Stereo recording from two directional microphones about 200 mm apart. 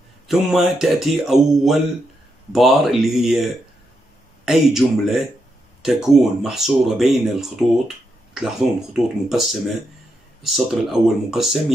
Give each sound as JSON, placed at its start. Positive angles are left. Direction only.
{"t": 0.3, "sound": "speech", "side_deg": 0}
{"t": 4.5, "sound": "speech", "side_deg": 0}